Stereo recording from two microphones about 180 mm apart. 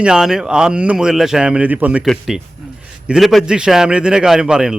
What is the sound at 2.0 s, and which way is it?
Speech, centre (ahead or behind).